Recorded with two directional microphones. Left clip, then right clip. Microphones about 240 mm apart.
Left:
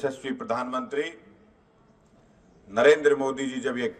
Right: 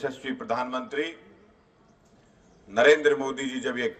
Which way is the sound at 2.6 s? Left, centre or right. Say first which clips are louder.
Even; left.